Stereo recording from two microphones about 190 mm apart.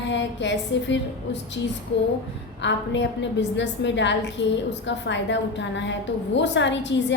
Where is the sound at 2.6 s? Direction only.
70° left (ahead or behind).